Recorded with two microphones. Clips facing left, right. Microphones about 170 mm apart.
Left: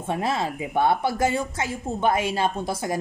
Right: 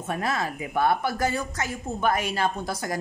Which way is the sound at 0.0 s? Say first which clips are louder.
Left 3 dB; 25° left (ahead or behind).